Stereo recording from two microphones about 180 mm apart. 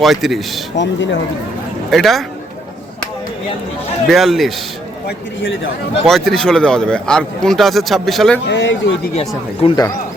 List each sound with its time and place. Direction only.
0.0 s speech: centre (ahead or behind)
0.8 s a man's voice: 80° left
1.9 s speech: centre (ahead or behind)
4.1 s speech: centre (ahead or behind)
5.0 s a man's voice: 80° left
6.1 s speech: centre (ahead or behind)
8.4 s a man's voice: 85° left
9.1 s speech: 30° left (ahead or behind)